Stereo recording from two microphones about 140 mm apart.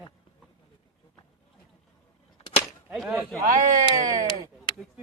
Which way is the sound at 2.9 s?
5° right (ahead or behind).